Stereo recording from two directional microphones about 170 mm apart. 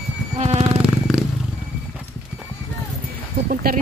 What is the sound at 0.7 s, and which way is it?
Music, 5° right (ahead or behind).